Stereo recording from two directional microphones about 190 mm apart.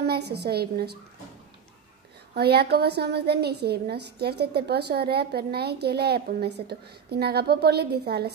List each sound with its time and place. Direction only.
0.0 s a woman's voice: 60° right (ahead or behind)
2.3 s a woman's voice: 55° right (ahead or behind)